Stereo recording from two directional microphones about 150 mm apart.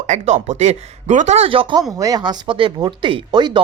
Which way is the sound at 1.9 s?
25° right (ahead or behind).